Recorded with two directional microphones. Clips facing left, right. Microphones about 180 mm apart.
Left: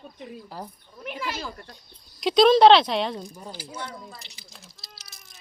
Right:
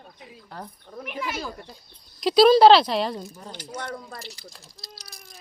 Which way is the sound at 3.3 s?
10° left (ahead or behind).